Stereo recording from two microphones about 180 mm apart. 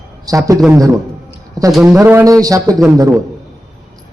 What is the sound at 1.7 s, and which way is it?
Speech, 5° right (ahead or behind).